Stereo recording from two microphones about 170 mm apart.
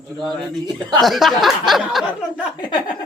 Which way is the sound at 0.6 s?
25° right (ahead or behind).